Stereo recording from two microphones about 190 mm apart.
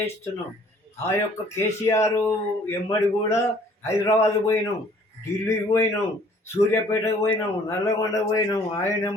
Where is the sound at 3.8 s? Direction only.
15° left (ahead or behind).